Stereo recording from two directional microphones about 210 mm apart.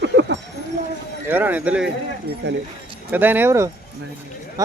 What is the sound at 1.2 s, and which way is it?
Speech, 10° right (ahead or behind).